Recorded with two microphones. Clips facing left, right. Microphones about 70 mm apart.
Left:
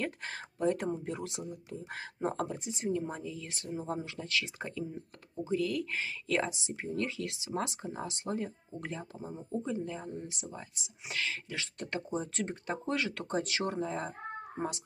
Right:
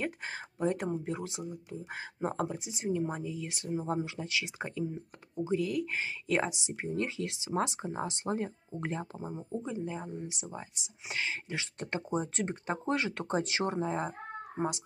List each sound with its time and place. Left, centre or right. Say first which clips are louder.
0.0 s speech: right 1 dB; centre; by 9.3 s right
9.6 s speech: left 1 dB; centre